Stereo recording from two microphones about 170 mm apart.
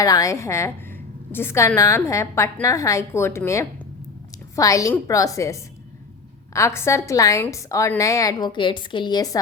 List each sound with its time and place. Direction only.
0.0 s a woman's voice: 20° left (ahead or behind)